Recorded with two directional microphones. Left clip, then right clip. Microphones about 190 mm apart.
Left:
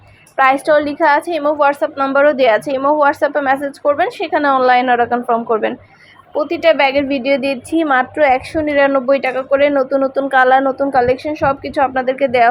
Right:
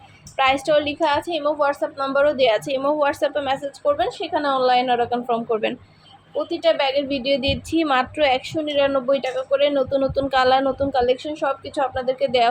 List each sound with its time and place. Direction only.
0.3 s a woman's voice: 10° left (ahead or behind)
6.3 s a woman's voice: 25° left (ahead or behind)
7.7 s a woman's voice: centre (ahead or behind)
8.7 s a woman's voice: 20° left (ahead or behind); by 10.8 s 5° left (ahead or behind)
10.9 s a woman's voice: 20° left (ahead or behind)